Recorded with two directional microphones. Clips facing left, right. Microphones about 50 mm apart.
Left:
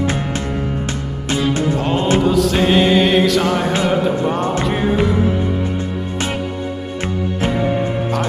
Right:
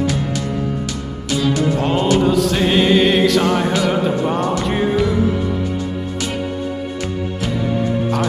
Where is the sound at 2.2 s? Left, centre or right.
Centre.